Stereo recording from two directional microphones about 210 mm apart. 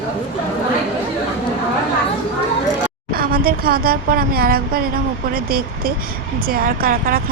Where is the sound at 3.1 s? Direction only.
45° right (ahead or behind).